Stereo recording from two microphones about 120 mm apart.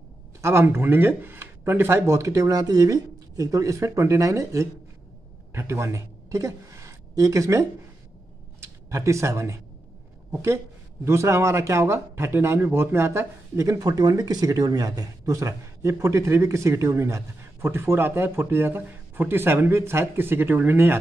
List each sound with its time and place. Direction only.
0.4 s a woman's voice: 20° right (ahead or behind)